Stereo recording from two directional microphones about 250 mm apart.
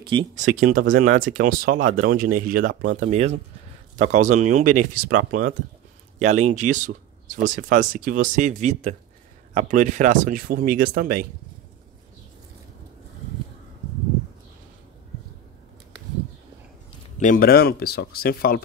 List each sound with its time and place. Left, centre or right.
0.0 s speech: centre
0.4 s speech: right
17.2 s speech: left